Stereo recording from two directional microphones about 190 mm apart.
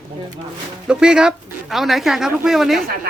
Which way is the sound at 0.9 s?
5° right (ahead or behind).